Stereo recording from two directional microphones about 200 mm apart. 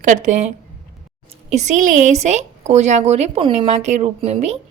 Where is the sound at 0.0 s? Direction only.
40° right (ahead or behind).